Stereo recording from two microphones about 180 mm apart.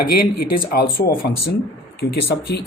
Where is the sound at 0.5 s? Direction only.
55° left (ahead or behind).